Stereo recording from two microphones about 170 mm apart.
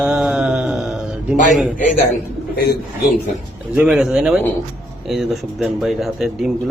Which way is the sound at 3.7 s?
5° right (ahead or behind).